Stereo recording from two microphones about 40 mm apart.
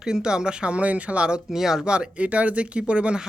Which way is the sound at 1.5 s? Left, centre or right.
Centre.